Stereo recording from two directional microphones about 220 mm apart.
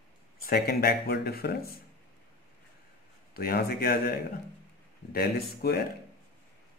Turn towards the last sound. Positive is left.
turn(degrees=45)  # may be behind; listen again after turning